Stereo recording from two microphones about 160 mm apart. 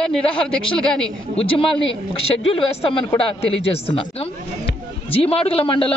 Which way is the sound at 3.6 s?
35° left (ahead or behind).